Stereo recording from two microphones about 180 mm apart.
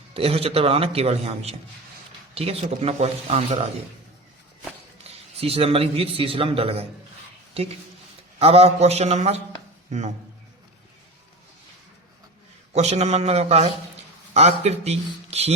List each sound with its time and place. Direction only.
0.1 s a man's voice: 30° right (ahead or behind)
5.4 s a man's voice: 35° right (ahead or behind)
12.7 s a man's voice: 40° right (ahead or behind)